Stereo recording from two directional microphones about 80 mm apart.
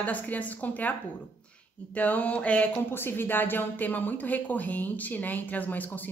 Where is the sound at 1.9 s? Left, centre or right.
Centre.